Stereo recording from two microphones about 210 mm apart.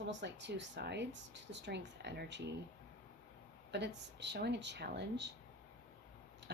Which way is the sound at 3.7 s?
55° right (ahead or behind).